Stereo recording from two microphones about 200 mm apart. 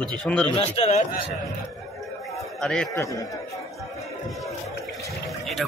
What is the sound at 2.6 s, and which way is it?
Speech, 5° left (ahead or behind).